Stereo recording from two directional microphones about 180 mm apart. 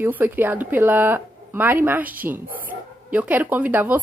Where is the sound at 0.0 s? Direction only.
10° right (ahead or behind).